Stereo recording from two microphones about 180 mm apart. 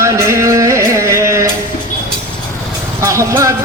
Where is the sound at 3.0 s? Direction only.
15° right (ahead or behind).